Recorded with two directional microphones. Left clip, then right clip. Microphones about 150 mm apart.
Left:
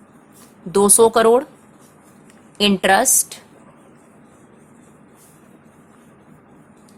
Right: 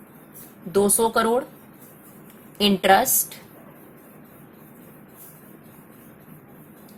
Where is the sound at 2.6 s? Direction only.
20° left (ahead or behind).